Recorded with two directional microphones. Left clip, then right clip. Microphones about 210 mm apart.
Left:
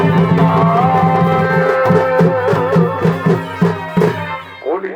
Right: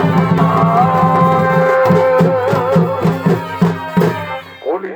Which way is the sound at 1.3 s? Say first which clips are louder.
Right 2 dB; 15° right (ahead or behind).